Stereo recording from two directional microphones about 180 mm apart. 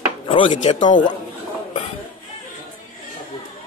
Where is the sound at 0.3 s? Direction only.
30° left (ahead or behind).